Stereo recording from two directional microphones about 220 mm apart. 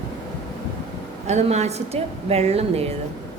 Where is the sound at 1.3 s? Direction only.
30° right (ahead or behind).